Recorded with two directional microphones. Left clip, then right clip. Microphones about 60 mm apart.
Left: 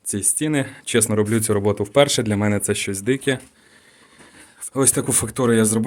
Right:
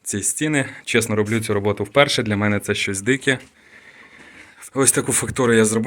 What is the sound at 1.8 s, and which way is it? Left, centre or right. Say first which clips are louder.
Speech: right 1 dB; left.